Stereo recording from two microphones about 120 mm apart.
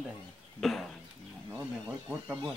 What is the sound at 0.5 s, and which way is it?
Speech, 5° left (ahead or behind).